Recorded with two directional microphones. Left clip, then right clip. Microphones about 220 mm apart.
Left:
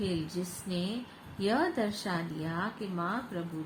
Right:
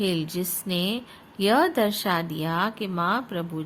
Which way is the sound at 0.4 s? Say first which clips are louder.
Right 8 dB; 45° right (ahead or behind).